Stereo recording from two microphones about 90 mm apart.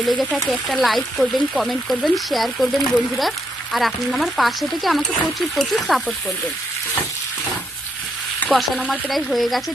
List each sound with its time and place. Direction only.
0.0 s speech: centre (ahead or behind)
8.4 s speech: centre (ahead or behind)